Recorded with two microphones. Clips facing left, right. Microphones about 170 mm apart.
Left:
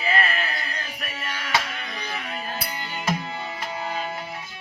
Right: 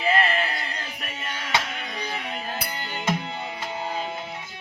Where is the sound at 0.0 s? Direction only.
25° right (ahead or behind).